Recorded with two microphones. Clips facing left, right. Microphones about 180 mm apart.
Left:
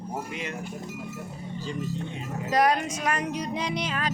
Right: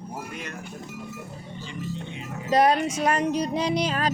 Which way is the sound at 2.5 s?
25° right (ahead or behind).